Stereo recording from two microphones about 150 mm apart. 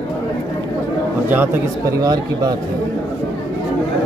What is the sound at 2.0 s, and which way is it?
Speech, 25° right (ahead or behind).